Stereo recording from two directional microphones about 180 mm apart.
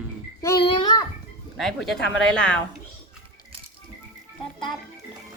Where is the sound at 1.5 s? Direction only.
Centre (ahead or behind).